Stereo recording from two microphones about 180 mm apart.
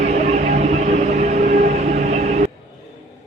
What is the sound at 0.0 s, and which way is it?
Music, 40° right (ahead or behind).